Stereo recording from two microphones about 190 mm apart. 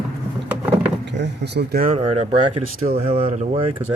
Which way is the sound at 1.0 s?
60° right (ahead or behind).